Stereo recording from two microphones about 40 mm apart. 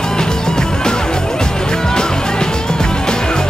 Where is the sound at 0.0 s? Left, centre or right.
Centre.